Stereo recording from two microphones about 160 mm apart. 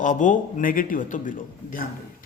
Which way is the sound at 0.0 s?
55° left (ahead or behind).